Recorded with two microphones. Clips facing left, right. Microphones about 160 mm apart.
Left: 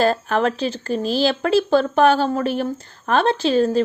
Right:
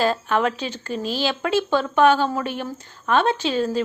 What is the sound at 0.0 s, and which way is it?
A woman's voice, 40° left (ahead or behind).